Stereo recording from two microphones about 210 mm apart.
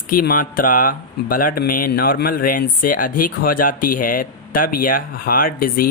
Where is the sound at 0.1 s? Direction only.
45° left (ahead or behind).